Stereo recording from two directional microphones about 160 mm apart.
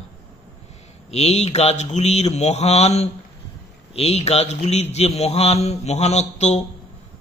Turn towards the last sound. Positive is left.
turn(degrees=45)  # may be behind; listen again after turning